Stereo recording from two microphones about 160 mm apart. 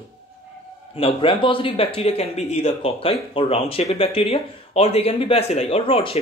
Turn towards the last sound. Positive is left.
turn(degrees=35)  # may be behind; listen again after turning